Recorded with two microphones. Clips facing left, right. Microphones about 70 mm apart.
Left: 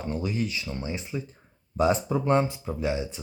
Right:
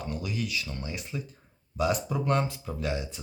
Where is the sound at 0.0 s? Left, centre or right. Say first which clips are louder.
Left 4 dB; left.